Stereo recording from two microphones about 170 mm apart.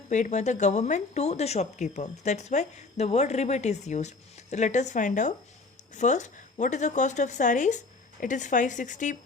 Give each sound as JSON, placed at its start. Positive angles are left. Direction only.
{"t": 0.1, "sound": "speech", "side_deg": 45}